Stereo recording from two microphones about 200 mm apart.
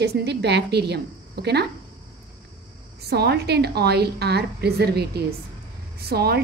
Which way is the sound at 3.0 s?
55° right (ahead or behind).